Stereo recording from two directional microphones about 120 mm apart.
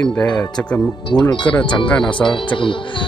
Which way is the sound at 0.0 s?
15° left (ahead or behind).